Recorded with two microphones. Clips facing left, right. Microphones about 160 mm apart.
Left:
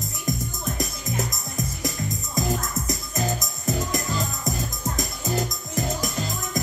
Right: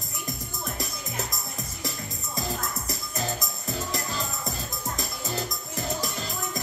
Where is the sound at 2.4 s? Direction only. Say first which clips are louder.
Left 6 dB; 15° left (ahead or behind).